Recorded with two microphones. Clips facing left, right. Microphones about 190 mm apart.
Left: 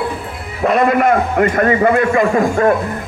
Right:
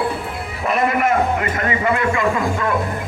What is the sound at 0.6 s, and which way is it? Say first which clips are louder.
A man's voice: left 6 dB; 60° left (ahead or behind).